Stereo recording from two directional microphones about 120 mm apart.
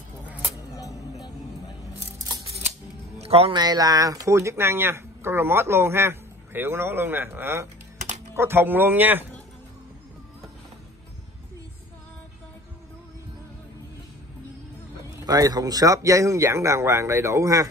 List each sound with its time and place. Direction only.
3.2 s music: 55° right (ahead or behind)
3.5 s a man's voice: 35° right (ahead or behind); by 9.2 s 15° right (ahead or behind)
15.2 s speech: 30° right (ahead or behind)